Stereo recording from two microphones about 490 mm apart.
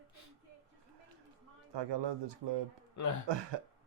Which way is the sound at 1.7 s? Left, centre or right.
Right.